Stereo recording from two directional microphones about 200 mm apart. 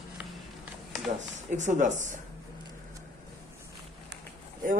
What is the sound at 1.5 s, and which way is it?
Speech, 40° right (ahead or behind).